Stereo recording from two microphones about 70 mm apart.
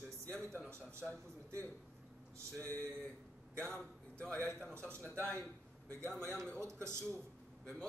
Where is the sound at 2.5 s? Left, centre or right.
Left.